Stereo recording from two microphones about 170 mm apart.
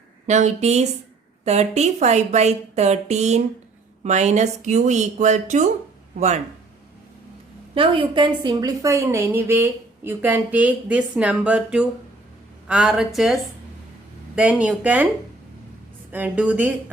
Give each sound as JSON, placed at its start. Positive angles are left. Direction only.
{"t": 0.3, "sound": "a woman's voice", "side_deg": -45}
{"t": 7.8, "sound": "a woman's voice", "side_deg": -30}
{"t": 16.1, "sound": "a woman's voice", "side_deg": -10}